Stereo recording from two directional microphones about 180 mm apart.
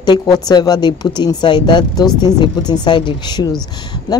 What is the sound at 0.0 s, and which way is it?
A woman's voice, 20° left (ahead or behind).